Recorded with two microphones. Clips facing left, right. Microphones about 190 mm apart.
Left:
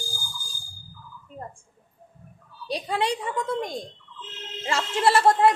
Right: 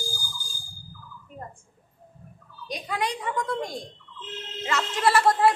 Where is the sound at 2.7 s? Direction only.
30° left (ahead or behind).